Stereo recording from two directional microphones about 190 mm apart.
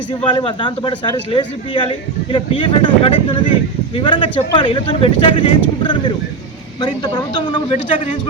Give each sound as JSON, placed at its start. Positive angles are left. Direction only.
{"t": 0.1, "sound": "speech", "side_deg": 25}